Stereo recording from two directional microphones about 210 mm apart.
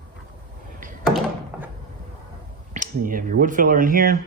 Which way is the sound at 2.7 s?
40° right (ahead or behind).